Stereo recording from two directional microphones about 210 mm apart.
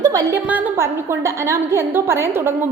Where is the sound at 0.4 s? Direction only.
10° right (ahead or behind).